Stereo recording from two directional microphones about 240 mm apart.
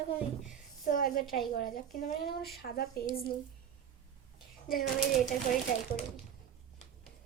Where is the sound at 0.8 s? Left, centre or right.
Left.